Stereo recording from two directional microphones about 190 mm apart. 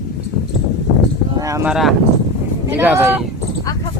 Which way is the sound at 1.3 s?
20° right (ahead or behind).